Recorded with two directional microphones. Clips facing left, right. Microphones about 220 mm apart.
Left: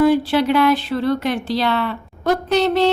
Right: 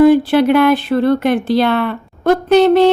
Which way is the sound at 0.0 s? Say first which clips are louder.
Right 6 dB; 55° right (ahead or behind).